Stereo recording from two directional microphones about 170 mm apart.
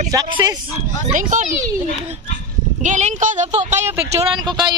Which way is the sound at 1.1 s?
50° right (ahead or behind).